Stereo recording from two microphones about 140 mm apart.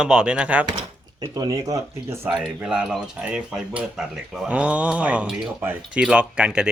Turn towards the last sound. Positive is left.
turn(degrees=-5)  # may be behind; listen again after turning